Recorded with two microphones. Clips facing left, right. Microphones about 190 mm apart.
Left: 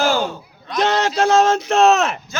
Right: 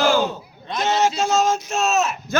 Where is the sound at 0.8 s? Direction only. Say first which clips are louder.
Left 2 dB; 60° left (ahead or behind).